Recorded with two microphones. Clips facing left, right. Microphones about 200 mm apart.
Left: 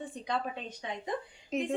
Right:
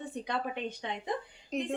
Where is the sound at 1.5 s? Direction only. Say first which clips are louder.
Left 1 dB; centre (ahead or behind).